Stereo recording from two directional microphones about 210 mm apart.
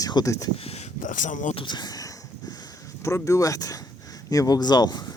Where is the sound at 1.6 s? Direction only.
20° left (ahead or behind).